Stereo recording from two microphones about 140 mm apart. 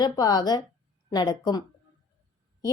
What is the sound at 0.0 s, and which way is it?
A woman's voice, 30° left (ahead or behind).